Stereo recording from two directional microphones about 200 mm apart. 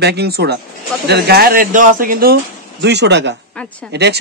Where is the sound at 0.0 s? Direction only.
55° right (ahead or behind).